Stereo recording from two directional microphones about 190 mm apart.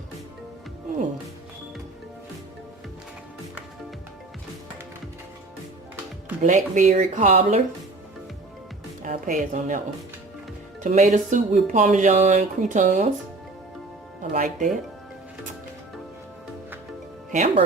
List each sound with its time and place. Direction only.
6.4 s speech: 40° right (ahead or behind)
9.0 s speech: 45° right (ahead or behind)
10.8 s speech: 40° right (ahead or behind)
14.3 s speech: 45° right (ahead or behind)
17.3 s speech: 35° right (ahead or behind)